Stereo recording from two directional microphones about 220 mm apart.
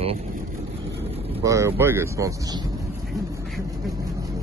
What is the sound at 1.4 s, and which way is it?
Speech, 15° right (ahead or behind).